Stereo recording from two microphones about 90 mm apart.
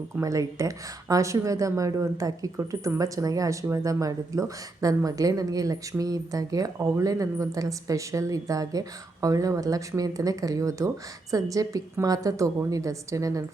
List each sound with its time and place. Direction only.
0.2 s speech: 40° right (ahead or behind)